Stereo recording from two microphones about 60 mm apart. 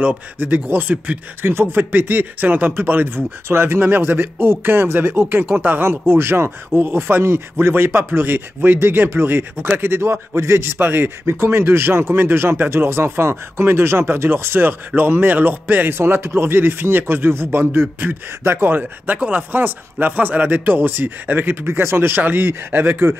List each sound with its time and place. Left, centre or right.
0.4 s speech: right
1.4 s a man's voice: right